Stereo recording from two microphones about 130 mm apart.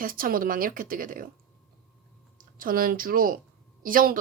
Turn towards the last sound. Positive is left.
turn(degrees=-90)